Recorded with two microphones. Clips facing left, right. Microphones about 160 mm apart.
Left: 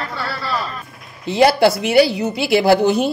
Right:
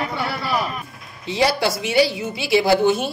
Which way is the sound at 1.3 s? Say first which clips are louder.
Left 7 dB; 65° left (ahead or behind).